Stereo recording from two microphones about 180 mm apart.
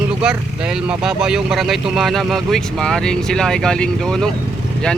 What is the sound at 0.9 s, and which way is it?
Speech, 5° right (ahead or behind).